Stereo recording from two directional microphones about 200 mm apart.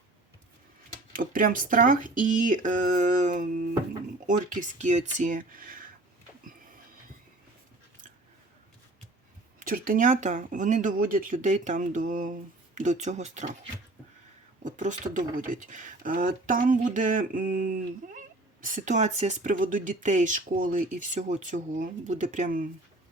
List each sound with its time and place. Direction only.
1.1 s speech: 45° right (ahead or behind)
9.6 s speech: 45° right (ahead or behind)
14.6 s speech: 40° right (ahead or behind)